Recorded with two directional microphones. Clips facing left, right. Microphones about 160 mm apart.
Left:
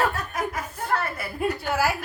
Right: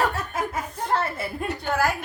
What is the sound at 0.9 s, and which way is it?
Speech, 25° right (ahead or behind).